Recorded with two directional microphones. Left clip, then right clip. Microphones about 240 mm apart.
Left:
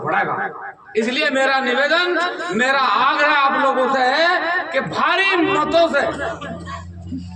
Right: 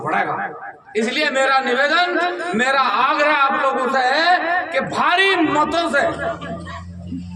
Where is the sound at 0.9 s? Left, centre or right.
Centre.